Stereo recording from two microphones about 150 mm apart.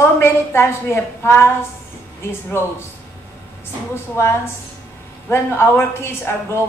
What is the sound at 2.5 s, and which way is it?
Speech, 15° left (ahead or behind).